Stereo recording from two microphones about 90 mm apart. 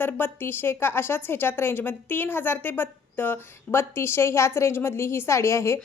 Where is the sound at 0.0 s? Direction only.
25° left (ahead or behind).